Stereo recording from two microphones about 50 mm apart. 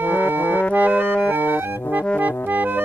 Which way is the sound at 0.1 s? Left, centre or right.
Right.